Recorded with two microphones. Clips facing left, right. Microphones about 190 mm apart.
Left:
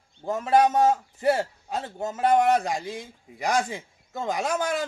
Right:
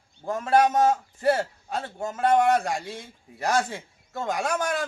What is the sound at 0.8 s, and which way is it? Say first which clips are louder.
A man's voice: even; 20° left (ahead or behind).